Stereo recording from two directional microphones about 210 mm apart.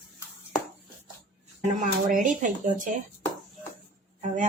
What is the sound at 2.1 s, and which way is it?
Speech, 40° right (ahead or behind).